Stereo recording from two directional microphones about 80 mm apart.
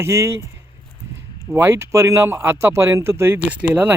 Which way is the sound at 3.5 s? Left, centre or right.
Centre.